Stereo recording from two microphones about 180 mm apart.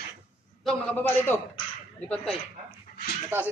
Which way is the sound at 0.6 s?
5° left (ahead or behind).